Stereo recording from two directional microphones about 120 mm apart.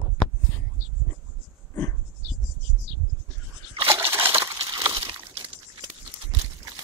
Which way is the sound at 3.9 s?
20° right (ahead or behind).